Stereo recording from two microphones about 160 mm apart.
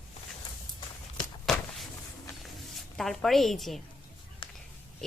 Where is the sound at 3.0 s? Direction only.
Centre (ahead or behind).